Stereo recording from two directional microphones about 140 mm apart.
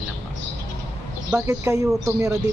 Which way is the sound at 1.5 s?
25° right (ahead or behind).